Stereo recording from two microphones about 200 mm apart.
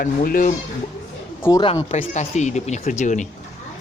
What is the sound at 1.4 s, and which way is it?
Speech, 15° left (ahead or behind).